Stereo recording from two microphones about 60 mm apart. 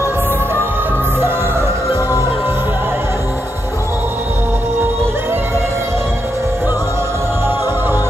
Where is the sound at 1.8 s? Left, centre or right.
Left.